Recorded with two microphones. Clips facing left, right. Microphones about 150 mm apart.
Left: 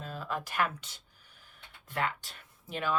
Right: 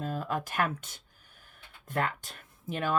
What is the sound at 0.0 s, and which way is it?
Speech, 45° right (ahead or behind).